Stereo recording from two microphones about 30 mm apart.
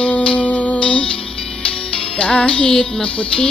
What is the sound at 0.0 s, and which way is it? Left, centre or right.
Music, left.